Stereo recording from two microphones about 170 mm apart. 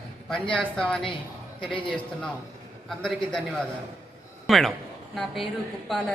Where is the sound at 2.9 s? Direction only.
5° left (ahead or behind).